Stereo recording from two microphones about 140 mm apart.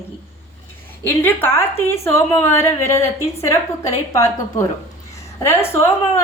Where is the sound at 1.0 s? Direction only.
15° left (ahead or behind).